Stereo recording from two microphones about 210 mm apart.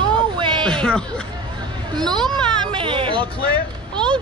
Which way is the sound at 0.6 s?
5° left (ahead or behind).